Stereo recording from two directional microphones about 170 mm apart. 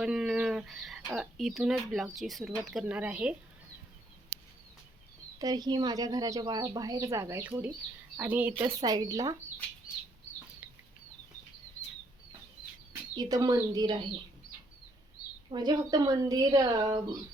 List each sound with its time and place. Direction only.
0.0 s speech: 5° right (ahead or behind)
5.4 s speech: 25° right (ahead or behind)
13.1 s speech: 20° right (ahead or behind)
15.4 s speech: 25° right (ahead or behind)